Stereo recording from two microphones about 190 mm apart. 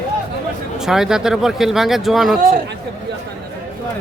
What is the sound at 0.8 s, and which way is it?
Speech, 5° right (ahead or behind).